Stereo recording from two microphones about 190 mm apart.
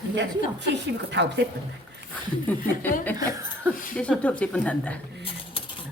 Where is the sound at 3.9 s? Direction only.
5° left (ahead or behind).